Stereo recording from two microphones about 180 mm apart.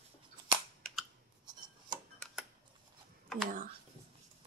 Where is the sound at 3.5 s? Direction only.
50° right (ahead or behind).